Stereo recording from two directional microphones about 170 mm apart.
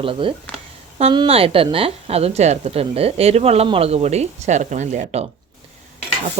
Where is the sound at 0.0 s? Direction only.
30° right (ahead or behind).